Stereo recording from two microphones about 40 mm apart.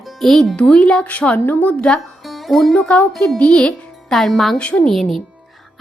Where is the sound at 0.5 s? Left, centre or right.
Left.